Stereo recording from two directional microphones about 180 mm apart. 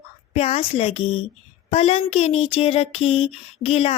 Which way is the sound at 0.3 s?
35° left (ahead or behind).